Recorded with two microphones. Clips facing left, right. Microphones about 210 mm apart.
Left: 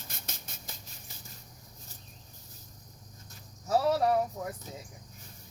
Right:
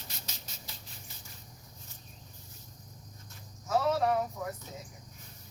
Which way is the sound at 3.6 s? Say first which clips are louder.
Left 2 dB; 35° left (ahead or behind).